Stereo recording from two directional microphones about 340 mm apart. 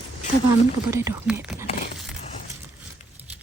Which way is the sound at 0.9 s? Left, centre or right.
Centre.